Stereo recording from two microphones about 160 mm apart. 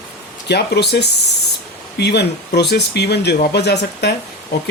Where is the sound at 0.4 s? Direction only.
90° left.